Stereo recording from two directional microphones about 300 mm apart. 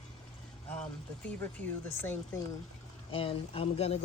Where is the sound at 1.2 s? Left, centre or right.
Centre.